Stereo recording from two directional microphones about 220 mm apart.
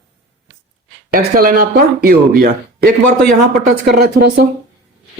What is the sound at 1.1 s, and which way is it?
Speech, 40° right (ahead or behind).